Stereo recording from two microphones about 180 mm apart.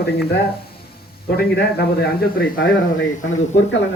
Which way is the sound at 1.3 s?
60° left (ahead or behind).